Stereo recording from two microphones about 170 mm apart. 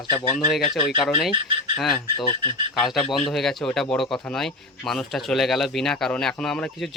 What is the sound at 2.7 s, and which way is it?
Speech, centre (ahead or behind).